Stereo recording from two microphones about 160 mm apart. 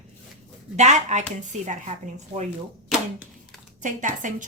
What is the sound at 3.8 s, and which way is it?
Speech, 55° right (ahead or behind).